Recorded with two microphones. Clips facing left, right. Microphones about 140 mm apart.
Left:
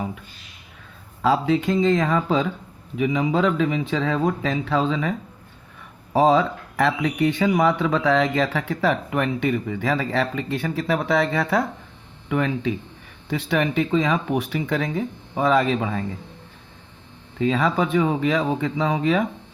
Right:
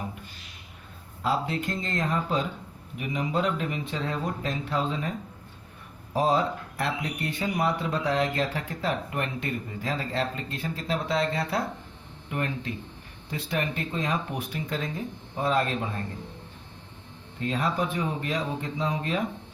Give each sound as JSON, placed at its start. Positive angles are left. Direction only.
{"t": 1.2, "sound": "speech", "side_deg": 90}
{"t": 6.1, "sound": "speech", "side_deg": 90}
{"t": 17.3, "sound": "speech", "side_deg": 90}